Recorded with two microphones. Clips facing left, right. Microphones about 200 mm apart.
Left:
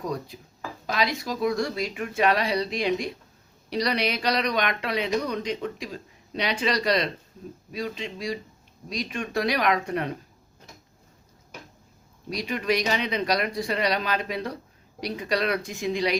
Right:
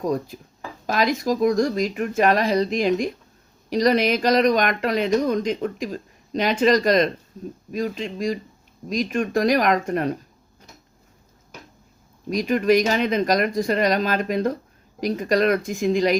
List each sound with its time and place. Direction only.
0.0 s speech: 45° right (ahead or behind)
12.3 s speech: 45° right (ahead or behind)